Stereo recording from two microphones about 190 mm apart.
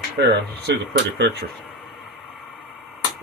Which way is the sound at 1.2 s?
65° right (ahead or behind).